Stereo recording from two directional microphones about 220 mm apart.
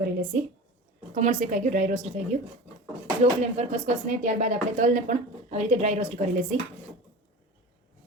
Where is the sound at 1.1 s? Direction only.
35° right (ahead or behind).